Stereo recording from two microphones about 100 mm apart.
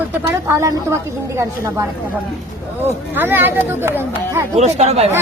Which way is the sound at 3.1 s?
20° right (ahead or behind).